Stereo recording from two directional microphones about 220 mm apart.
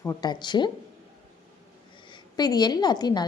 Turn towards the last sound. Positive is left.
turn(degrees=20)  # may be behind; listen again after turning